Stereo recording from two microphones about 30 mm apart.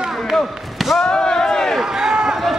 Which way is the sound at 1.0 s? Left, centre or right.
Left.